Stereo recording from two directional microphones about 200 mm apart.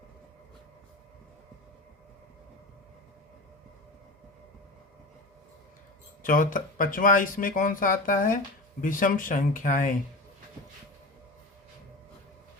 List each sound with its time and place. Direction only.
6.2 s speech: 45° left (ahead or behind)